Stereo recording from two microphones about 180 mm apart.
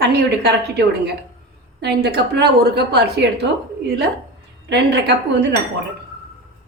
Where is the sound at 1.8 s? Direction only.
65° right (ahead or behind).